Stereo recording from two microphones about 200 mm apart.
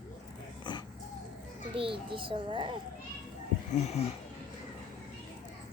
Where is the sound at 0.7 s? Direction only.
25° left (ahead or behind).